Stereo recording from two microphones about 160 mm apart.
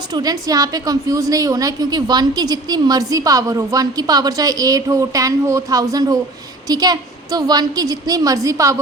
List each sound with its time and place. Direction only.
0.1 s a woman's voice: 25° right (ahead or behind)